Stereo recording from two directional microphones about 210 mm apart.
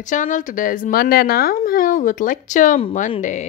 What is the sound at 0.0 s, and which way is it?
Speech, 35° left (ahead or behind).